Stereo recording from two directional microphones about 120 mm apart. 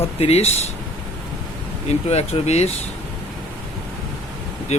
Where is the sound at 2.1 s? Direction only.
60° left (ahead or behind).